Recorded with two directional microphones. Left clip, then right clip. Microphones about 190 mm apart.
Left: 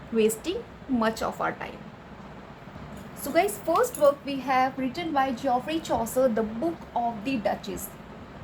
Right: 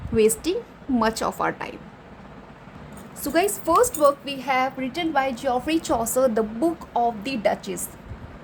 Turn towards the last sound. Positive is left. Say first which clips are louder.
# right 4 dB
turn(degrees=-65)  # may be behind; listen again after turning